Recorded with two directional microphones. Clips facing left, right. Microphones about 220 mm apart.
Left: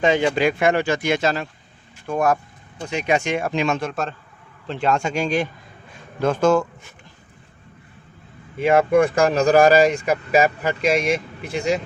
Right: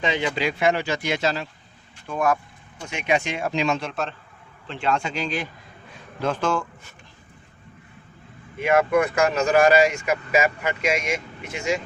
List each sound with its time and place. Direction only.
0.0 s speech: 45° left (ahead or behind)
8.6 s speech: 30° left (ahead or behind)